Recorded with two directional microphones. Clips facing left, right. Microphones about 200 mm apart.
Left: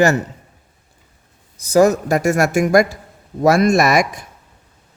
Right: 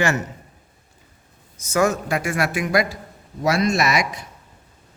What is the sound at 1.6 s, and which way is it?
Speech, 35° left (ahead or behind).